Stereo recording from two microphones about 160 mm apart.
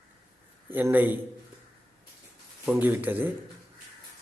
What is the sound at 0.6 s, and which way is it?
Speech, 10° right (ahead or behind).